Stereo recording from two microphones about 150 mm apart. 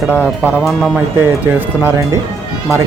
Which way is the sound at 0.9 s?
15° right (ahead or behind).